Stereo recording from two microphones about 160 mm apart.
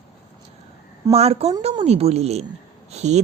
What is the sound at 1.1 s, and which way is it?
Speech, 40° right (ahead or behind).